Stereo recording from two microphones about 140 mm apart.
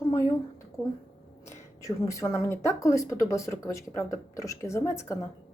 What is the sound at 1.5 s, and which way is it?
Speech, 20° left (ahead or behind).